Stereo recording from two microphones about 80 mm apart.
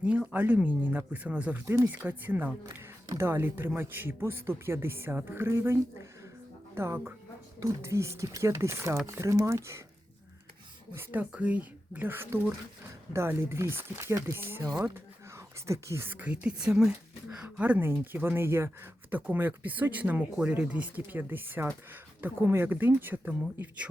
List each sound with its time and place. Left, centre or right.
0.0 s speech: centre
1.6 s a woman's voice: right
1.9 s a woman's voice: right
10.9 s a woman's voice: right
14.6 s speech: right
14.9 s whispering: right
16.0 s speech: right
17.4 s a woman's voice: centre
19.3 s speech: right